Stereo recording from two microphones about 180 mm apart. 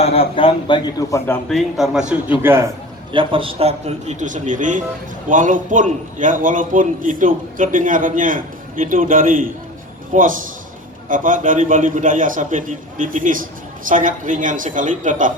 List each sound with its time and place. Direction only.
0.0 s a man's voice: 35° left (ahead or behind)
1.5 s a man's voice: centre (ahead or behind)
3.1 s a man's voice: 30° right (ahead or behind); by 15.3 s 45° right (ahead or behind)